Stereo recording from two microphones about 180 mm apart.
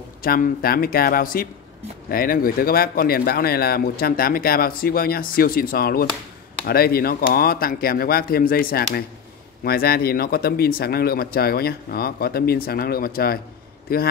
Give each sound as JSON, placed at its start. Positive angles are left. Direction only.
{"t": 0.2, "sound": "speech", "side_deg": 55}